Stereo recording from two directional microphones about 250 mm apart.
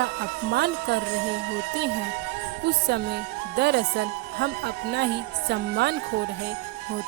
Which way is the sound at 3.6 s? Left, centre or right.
Right.